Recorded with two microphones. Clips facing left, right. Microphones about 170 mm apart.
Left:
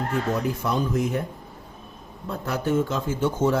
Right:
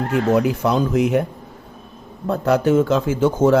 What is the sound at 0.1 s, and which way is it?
Speech, 80° right.